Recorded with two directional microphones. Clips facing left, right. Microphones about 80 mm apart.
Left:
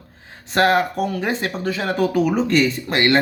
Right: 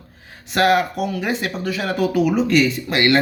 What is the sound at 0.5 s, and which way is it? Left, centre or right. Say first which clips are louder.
Speech: even; left.